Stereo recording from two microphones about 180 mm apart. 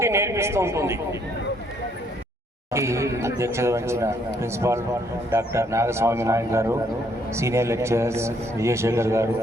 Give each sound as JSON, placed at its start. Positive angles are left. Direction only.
{"t": 0.0, "sound": "speech", "side_deg": -15}
{"t": 2.7, "sound": "speech", "side_deg": -15}